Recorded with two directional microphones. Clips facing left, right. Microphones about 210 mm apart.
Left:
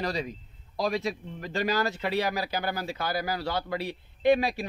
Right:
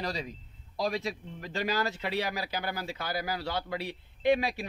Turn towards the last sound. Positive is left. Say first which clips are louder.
# left 3 dB
turn(degrees=40)  # may be behind; listen again after turning